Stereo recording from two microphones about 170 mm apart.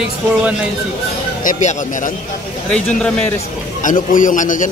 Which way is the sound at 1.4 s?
45° left (ahead or behind).